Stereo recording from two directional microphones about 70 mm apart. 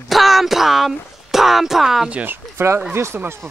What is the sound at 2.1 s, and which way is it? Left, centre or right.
Speech, right.